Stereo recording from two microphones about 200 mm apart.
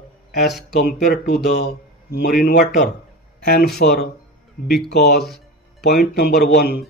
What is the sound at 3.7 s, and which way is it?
Speech, 50° left (ahead or behind).